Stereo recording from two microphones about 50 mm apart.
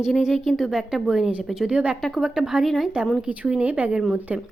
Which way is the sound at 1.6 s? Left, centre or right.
Right.